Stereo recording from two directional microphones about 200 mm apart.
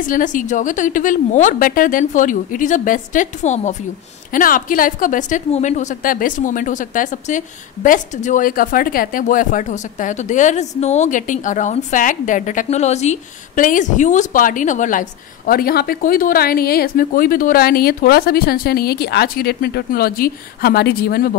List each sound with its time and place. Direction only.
0.0 s a woman's voice: 40° left (ahead or behind)